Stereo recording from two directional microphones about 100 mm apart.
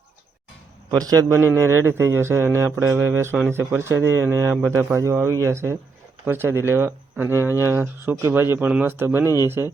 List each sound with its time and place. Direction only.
0.9 s a man's voice: 35° right (ahead or behind); by 9.2 s 20° right (ahead or behind)
9.2 s speech: 35° left (ahead or behind)
9.5 s a man's voice: 25° right (ahead or behind)